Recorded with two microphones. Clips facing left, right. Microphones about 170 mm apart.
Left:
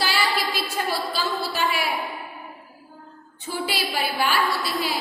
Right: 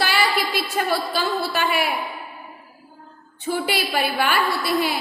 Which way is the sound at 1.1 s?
60° right (ahead or behind).